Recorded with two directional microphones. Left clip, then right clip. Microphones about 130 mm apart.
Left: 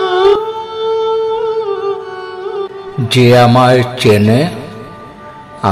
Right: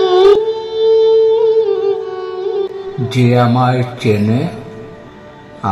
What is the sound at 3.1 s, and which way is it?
Music, 85° left.